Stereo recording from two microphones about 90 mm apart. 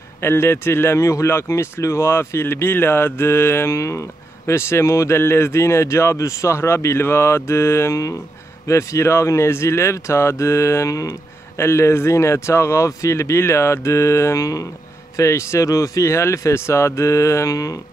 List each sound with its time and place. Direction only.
0.2 s speech: 25° left (ahead or behind)